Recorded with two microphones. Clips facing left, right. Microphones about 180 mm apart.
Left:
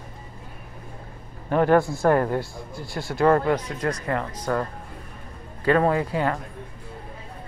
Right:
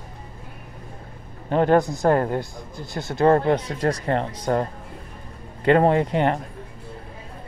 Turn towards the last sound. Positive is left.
turn(degrees=-25)  # may be behind; listen again after turning